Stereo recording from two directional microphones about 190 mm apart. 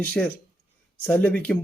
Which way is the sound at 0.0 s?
5° left (ahead or behind).